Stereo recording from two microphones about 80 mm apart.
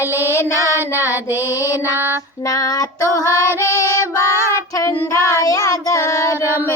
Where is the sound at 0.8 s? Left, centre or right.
Right.